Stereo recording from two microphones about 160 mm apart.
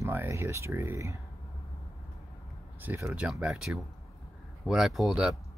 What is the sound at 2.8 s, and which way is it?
Speech, 15° right (ahead or behind).